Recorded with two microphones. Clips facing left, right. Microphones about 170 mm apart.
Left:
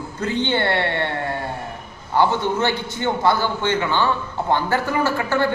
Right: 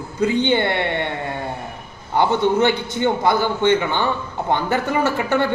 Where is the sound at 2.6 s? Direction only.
20° right (ahead or behind).